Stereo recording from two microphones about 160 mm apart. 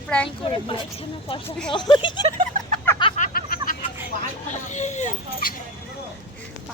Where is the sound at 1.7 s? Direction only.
30° left (ahead or behind).